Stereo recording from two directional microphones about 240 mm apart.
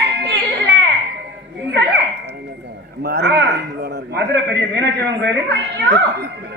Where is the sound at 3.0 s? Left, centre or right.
Right.